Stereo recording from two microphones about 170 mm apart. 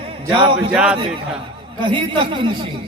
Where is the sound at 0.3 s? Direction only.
30° right (ahead or behind).